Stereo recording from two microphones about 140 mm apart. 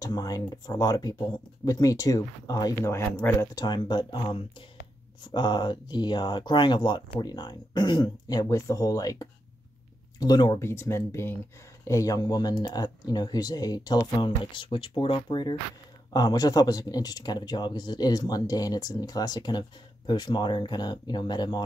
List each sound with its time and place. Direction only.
0.0 s speech: 25° left (ahead or behind)
3.5 s speech: 30° left (ahead or behind)
10.7 s speech: 20° left (ahead or behind)